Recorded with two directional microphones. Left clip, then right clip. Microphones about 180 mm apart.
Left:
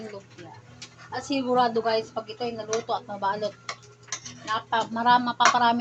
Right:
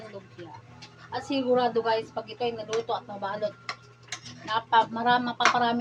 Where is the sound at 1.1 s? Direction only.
20° left (ahead or behind).